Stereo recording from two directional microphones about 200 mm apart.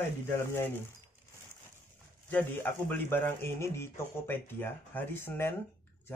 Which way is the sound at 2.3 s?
10° left (ahead or behind).